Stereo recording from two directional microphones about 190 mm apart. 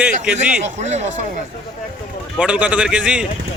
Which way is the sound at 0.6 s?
35° right (ahead or behind).